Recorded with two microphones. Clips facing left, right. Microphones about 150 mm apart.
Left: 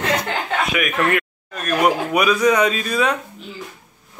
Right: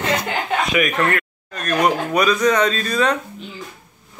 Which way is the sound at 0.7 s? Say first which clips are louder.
Even; 5° left (ahead or behind).